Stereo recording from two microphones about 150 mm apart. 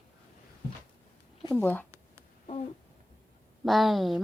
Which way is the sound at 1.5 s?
10° left (ahead or behind).